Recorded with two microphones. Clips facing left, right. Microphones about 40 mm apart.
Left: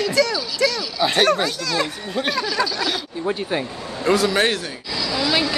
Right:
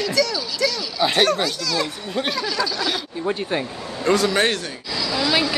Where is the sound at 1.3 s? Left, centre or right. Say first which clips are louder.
Left 1 dB; left.